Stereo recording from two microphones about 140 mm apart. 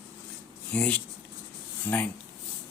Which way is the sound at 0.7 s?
10° left (ahead or behind).